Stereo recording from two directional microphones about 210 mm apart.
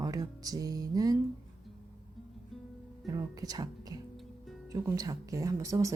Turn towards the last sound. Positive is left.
turn(degrees=-15)  # may be behind; listen again after turning